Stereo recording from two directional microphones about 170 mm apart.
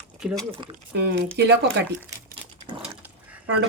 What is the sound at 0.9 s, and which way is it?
Speech, 85° right.